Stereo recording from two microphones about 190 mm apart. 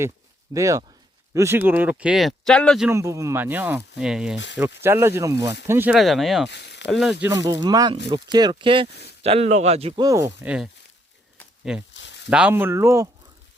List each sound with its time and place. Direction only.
0.5 s speech: 15° right (ahead or behind); by 2.9 s centre (ahead or behind)
2.9 s speech: 15° right (ahead or behind)
6.5 s speech: 65° left (ahead or behind)
6.9 s speech: centre (ahead or behind)
7.3 s speech: 15° right (ahead or behind); by 10.0 s 35° right (ahead or behind)
10.0 s speech: 15° right (ahead or behind)
11.9 s a sound: 70° left (ahead or behind)
12.3 s speech: 5° right (ahead or behind)